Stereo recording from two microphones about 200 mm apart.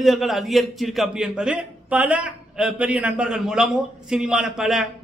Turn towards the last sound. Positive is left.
turn(degrees=0)  # may be behind; listen again after turning